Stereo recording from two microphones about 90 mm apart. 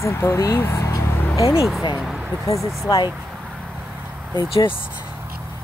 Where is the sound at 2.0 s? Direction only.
10° right (ahead or behind).